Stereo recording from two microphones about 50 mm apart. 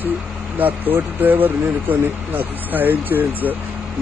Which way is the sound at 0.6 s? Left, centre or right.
Right.